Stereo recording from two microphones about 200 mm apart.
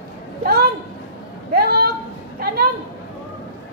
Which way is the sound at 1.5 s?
50° right (ahead or behind).